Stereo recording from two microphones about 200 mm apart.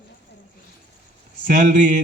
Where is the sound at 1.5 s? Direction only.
40° right (ahead or behind).